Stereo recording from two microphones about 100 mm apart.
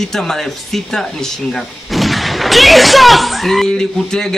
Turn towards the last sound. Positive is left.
turn(degrees=5)  # may be behind; listen again after turning